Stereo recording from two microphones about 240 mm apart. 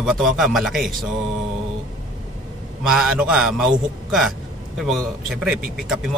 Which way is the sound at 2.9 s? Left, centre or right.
Centre.